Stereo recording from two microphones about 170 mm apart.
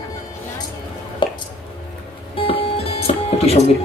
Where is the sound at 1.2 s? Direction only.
30° left (ahead or behind).